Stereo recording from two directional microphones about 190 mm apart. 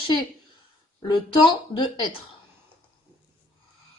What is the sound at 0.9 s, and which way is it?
Speech, 25° left (ahead or behind).